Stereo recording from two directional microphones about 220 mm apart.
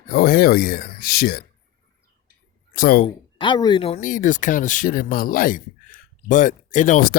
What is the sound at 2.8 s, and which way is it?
Speech, 45° left (ahead or behind).